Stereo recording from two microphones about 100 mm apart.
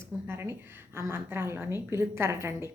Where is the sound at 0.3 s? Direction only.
25° right (ahead or behind).